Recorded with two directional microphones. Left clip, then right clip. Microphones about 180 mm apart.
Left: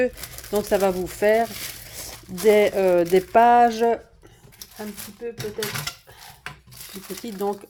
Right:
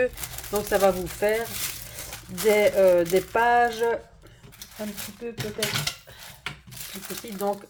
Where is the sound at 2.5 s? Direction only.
45° left (ahead or behind).